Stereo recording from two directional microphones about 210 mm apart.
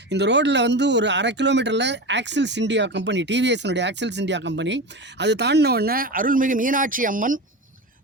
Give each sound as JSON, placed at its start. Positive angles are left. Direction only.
{"t": 0.1, "sound": "speech", "side_deg": -55}